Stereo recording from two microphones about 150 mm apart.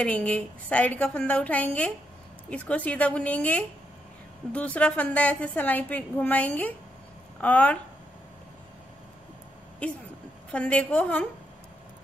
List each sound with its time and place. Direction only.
0.0 s a woman's voice: 10° left (ahead or behind)
9.8 s a woman's voice: 10° left (ahead or behind)